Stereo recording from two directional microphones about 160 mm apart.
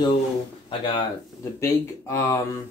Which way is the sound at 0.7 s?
35° left (ahead or behind).